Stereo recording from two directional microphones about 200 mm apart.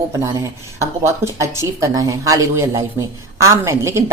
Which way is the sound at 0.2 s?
15° right (ahead or behind).